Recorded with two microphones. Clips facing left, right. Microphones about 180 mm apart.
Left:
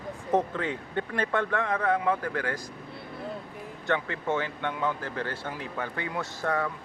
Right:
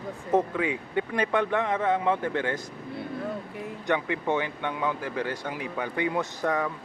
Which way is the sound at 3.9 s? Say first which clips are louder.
Right 2 dB; 15° right (ahead or behind).